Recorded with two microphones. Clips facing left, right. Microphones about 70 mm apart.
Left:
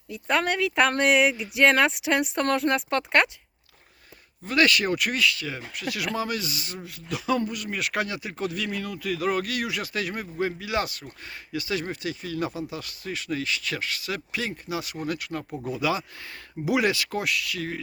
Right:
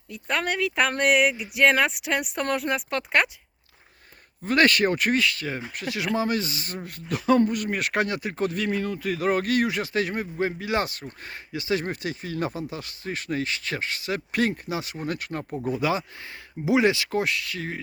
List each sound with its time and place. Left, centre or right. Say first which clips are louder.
0.1 s speech: left 2 dB; centre
4.4 s speech: right 2 dB; right
14.3 s speech: right 7 dB; right